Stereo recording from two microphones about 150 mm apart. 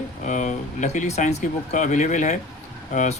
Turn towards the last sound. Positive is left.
turn(degrees=55)  # may be behind; listen again after turning